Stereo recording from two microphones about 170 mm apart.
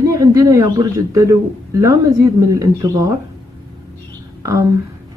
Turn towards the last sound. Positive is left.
turn(degrees=-20)  # may be behind; listen again after turning